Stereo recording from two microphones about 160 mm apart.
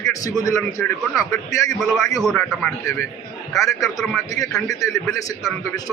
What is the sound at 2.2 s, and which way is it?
Speech, centre (ahead or behind).